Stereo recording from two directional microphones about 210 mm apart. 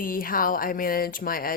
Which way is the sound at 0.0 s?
40° left (ahead or behind).